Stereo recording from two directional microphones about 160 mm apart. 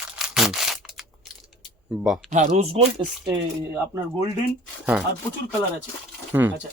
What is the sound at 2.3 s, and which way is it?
Speech, 50° right (ahead or behind).